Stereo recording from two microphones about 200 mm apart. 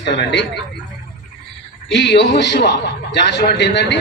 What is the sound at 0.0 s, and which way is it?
Speech, 60° left (ahead or behind).